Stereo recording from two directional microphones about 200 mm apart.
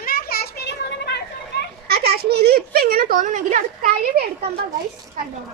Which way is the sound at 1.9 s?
50° right (ahead or behind).